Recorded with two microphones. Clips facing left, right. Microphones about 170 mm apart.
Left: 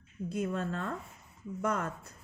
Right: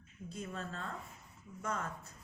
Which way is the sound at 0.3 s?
60° left (ahead or behind).